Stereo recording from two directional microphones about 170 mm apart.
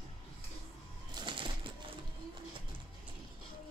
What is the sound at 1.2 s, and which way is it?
Bird, 30° right (ahead or behind).